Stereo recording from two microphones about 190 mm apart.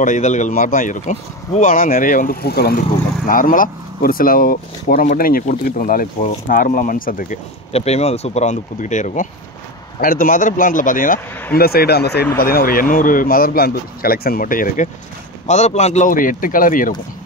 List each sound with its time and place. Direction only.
0.0 s speech: 40° left (ahead or behind)
7.7 s speech: 35° left (ahead or behind)
15.4 s speech: 35° left (ahead or behind)